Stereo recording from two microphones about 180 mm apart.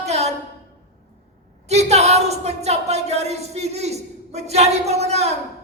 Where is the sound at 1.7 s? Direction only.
35° right (ahead or behind).